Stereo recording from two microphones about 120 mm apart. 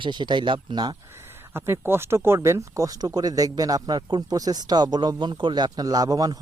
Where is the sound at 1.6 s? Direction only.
20° right (ahead or behind).